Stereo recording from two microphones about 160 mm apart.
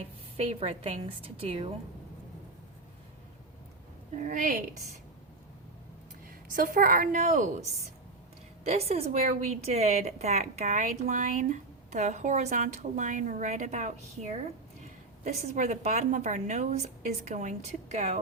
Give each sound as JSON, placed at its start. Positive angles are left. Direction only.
{"t": 0.3, "sound": "a woman's voice", "side_deg": -35}
{"t": 4.1, "sound": "a woman's voice", "side_deg": -55}
{"t": 6.2, "sound": "a woman's voice", "side_deg": -60}
{"t": 8.6, "sound": "a woman's voice", "side_deg": -40}